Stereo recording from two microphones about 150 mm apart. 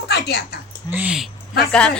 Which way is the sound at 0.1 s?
90° left.